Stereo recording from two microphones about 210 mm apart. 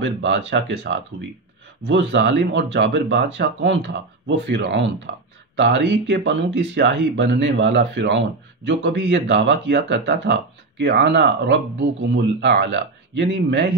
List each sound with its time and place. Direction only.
0.0 s speech: 60° right (ahead or behind)